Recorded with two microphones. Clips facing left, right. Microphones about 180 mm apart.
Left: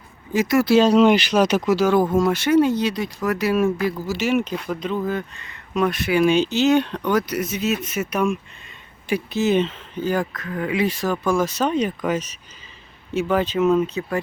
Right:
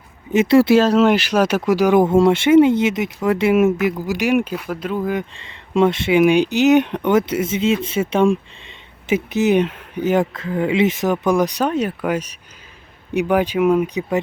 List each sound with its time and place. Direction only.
0.3 s speech: 25° right (ahead or behind)
0.7 s speech: 5° right (ahead or behind)
5.4 s speech: 25° right (ahead or behind)